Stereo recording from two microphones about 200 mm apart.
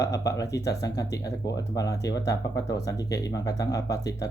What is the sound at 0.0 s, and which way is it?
Speech, 15° left (ahead or behind).